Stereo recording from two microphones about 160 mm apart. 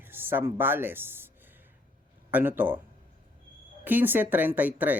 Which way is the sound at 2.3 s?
10° right (ahead or behind).